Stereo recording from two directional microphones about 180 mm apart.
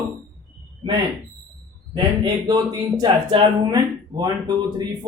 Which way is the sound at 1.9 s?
25° right (ahead or behind).